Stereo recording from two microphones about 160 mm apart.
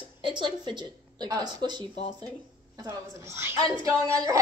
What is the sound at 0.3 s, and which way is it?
Speech, 30° right (ahead or behind).